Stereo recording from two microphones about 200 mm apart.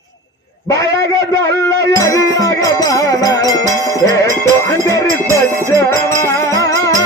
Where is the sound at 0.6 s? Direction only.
15° left (ahead or behind).